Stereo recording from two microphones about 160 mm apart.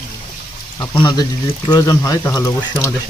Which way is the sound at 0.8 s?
25° left (ahead or behind).